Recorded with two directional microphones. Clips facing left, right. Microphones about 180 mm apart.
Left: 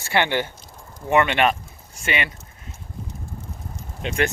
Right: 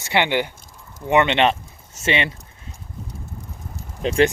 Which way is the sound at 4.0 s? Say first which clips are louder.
Right 6 dB; 30° right (ahead or behind).